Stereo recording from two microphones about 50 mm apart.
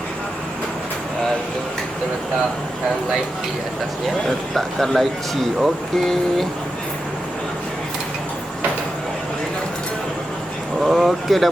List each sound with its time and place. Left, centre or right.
4.3 s speech: centre
10.8 s speech: centre